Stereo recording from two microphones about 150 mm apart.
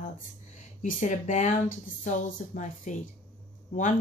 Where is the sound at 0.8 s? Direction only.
55° left (ahead or behind).